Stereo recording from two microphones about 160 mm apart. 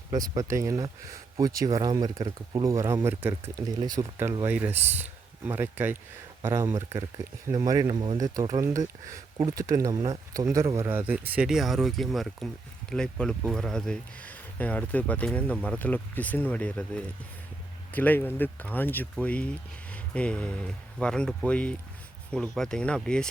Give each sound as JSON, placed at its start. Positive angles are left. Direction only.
{"t": 0.1, "sound": "speech", "side_deg": -25}